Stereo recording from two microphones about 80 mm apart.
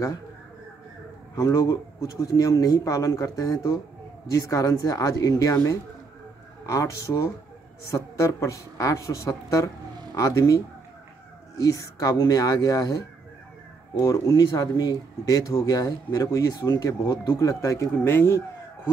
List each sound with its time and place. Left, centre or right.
1.3 s speech: left
6.6 s speech: left
11.6 s speech: left
14.1 s speech: left